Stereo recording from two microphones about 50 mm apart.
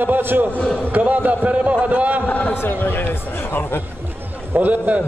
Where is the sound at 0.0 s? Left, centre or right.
Right.